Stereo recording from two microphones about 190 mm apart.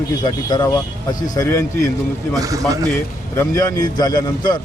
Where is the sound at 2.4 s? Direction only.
20° right (ahead or behind).